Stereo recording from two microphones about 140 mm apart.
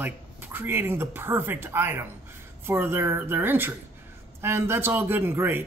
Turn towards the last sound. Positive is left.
turn(degrees=-15)  # may be behind; listen again after turning